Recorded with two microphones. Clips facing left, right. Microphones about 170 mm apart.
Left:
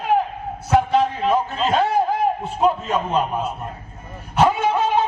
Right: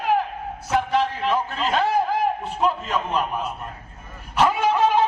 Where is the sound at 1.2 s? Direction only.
25° left (ahead or behind).